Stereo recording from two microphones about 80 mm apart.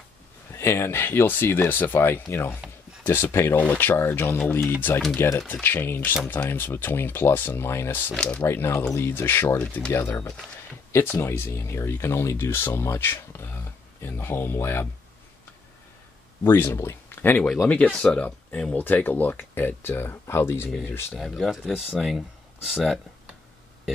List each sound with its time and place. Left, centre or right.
0.5 s speech: left
8.1 s speech: centre
8.4 s speech: left
9.6 s speech: centre
9.9 s speech: left
16.5 s speech: left
17.6 s speech: centre
21.1 s speech: centre